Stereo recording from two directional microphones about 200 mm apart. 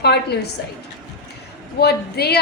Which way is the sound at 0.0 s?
55° left (ahead or behind).